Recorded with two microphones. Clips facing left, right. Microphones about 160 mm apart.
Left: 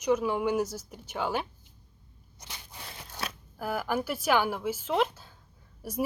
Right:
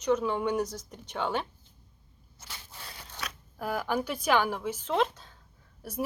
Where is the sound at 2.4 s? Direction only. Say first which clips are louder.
Left 1 dB; 15° left (ahead or behind).